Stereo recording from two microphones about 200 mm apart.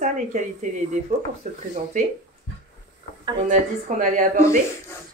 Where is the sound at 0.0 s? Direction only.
40° right (ahead or behind).